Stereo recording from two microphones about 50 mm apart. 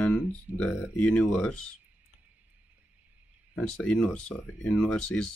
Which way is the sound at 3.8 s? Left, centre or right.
Left.